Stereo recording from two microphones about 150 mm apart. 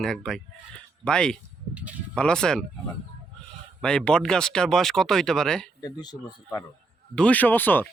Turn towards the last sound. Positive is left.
turn(degrees=15)  # may be behind; listen again after turning